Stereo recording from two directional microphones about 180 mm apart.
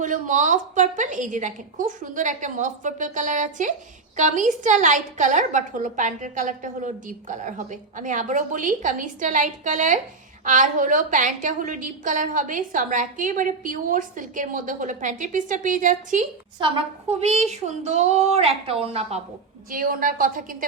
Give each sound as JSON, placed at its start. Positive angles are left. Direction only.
{"t": 0.0, "sound": "a woman's voice", "side_deg": -45}
{"t": 16.6, "sound": "speech", "side_deg": -30}
{"t": 19.7, "sound": "a woman's voice", "side_deg": -50}